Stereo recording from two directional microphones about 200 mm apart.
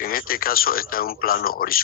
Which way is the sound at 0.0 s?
45° left (ahead or behind).